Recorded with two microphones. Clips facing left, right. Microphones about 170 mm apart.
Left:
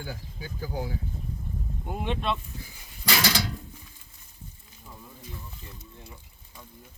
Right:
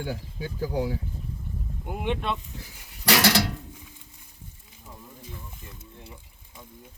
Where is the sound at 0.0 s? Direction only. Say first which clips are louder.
Right 6 dB; 70° right (ahead or behind).